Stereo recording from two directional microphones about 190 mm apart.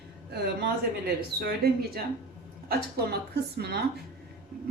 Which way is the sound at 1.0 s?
55° right (ahead or behind).